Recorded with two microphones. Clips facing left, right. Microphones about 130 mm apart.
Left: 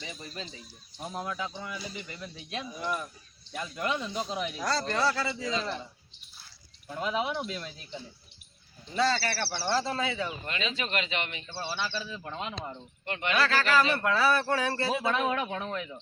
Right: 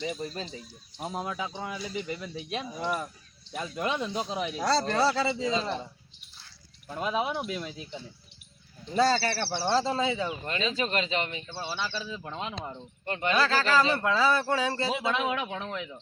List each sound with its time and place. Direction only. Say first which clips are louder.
0.0 s a man's voice: right 8 dB; 40° right (ahead or behind)
1.1 s a man's voice: right 1 dB; 20° right (ahead or behind)
2.7 s a man's voice: right 2 dB; 35° right (ahead or behind)
3.5 s a man's voice: right 1 dB; 20° right (ahead or behind)
6.8 s speech: right 1 dB; 15° right (ahead or behind)
9.4 s a man's voice: right 3 dB; 20° right (ahead or behind)
10.4 s a man's voice: right 4 dB; 35° right (ahead or behind)
11.4 s speech: even; 15° right (ahead or behind)
13.1 s speech: right 2 dB; 30° right (ahead or behind); by 15.6 s 10° right (ahead or behind)